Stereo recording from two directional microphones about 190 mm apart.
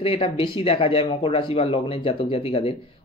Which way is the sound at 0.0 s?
30° left (ahead or behind).